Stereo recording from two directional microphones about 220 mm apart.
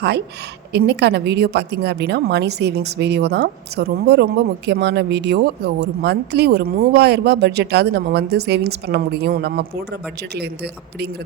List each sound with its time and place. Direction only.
0.7 s a woman's voice: 50° right (ahead or behind)